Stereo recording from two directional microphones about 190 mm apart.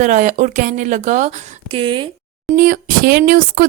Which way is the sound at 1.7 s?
25° right (ahead or behind).